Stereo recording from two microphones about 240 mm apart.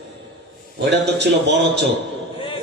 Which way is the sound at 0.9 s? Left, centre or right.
Right.